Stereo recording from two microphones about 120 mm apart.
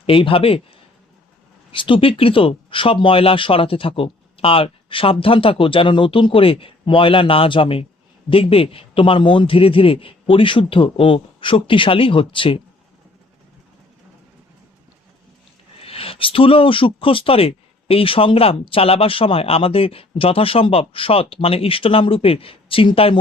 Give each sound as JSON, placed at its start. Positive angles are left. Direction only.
{"t": 0.0, "sound": "speech", "side_deg": 50}
{"t": 1.7, "sound": "speech", "side_deg": 45}
{"t": 15.8, "sound": "speech", "side_deg": 50}